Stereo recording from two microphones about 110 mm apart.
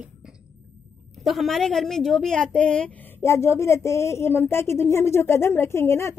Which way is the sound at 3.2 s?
25° left (ahead or behind).